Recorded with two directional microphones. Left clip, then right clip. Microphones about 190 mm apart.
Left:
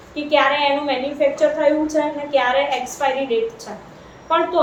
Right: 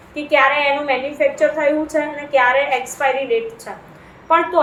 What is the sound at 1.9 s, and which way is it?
A woman's voice, 20° right (ahead or behind).